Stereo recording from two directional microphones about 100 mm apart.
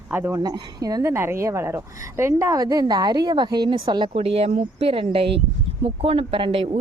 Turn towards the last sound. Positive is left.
turn(degrees=-65)  # may be behind; listen again after turning